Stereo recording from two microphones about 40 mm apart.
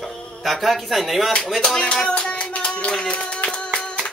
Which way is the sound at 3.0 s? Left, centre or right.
Left.